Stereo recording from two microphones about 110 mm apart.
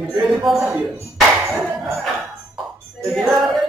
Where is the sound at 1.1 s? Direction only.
Centre (ahead or behind).